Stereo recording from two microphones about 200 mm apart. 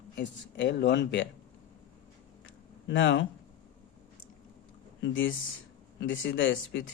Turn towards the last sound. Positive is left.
turn(degrees=65)  # may be behind; listen again after turning